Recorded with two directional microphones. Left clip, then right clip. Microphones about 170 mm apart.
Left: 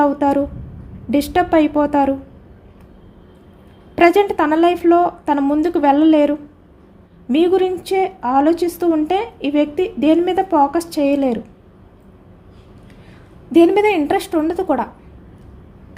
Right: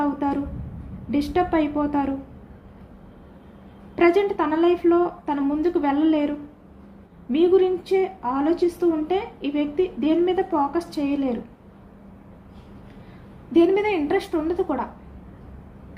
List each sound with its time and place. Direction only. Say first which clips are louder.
0.0 s a sound: left 9 dB; 90° left
1.1 s a woman's voice: left 7 dB; 90° left
3.9 s a woman's voice: left 6 dB; 90° left
13.5 s a woman's voice: left 7 dB; 90° left